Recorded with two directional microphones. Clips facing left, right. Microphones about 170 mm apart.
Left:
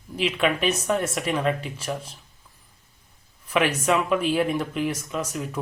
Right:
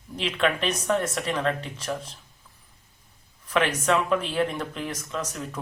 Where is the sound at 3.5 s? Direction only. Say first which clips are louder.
Left 1 dB; 10° left (ahead or behind).